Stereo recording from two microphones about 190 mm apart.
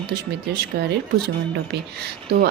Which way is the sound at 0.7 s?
60° right (ahead or behind).